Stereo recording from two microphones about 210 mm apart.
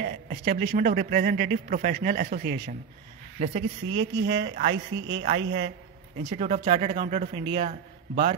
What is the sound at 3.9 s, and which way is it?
A man's voice, 60° right (ahead or behind).